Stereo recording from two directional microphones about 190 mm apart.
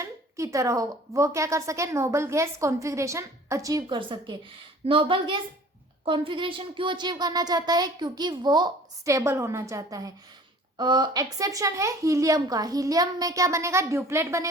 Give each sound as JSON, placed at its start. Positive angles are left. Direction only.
{"t": 0.0, "sound": "a woman's voice", "side_deg": -15}